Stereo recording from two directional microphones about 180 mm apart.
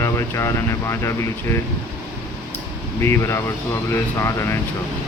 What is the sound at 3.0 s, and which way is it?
Speech, 15° left (ahead or behind).